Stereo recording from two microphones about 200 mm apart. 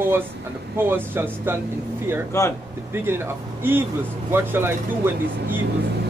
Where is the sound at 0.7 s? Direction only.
10° right (ahead or behind).